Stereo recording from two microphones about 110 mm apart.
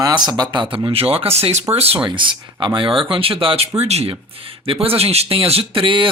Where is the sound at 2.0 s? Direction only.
45° right (ahead or behind).